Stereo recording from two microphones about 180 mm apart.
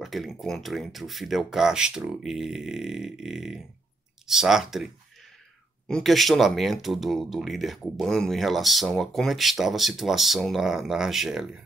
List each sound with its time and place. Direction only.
0.0 s speech: centre (ahead or behind)